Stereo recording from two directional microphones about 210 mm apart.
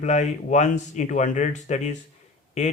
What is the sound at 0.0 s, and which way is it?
Speech, 35° left (ahead or behind).